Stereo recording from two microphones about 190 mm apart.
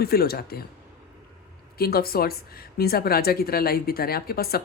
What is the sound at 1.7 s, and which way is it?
A woman's voice, 55° left (ahead or behind).